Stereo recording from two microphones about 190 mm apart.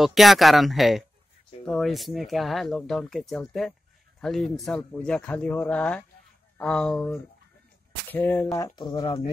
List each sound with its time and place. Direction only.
0.0 s speech: centre (ahead or behind); by 9.3 s 25° left (ahead or behind)